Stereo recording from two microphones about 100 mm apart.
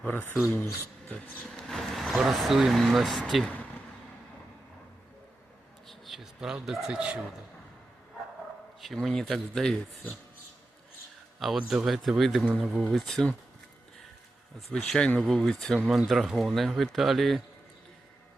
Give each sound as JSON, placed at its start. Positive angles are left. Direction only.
{"t": 0.0, "sound": "speech", "side_deg": 20}
{"t": 1.0, "sound": "speech", "side_deg": 5}
{"t": 5.9, "sound": "speech", "side_deg": 0}
{"t": 8.8, "sound": "speech", "side_deg": 0}
{"t": 11.3, "sound": "speech", "side_deg": 0}
{"t": 14.7, "sound": "speech", "side_deg": 5}